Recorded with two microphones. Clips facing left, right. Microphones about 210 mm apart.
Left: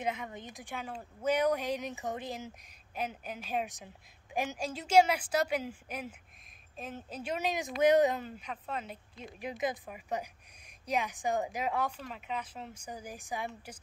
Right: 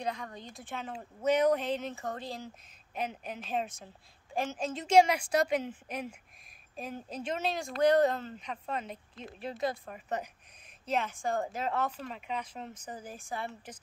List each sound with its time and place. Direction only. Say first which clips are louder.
0.0 s a woman's voice: left 1 dB; 20° left (ahead or behind)
2.9 s a woman's voice: right 1 dB; 5° left (ahead or behind)